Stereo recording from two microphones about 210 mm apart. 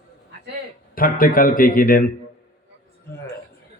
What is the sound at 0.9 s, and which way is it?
A man's voice, 40° left (ahead or behind).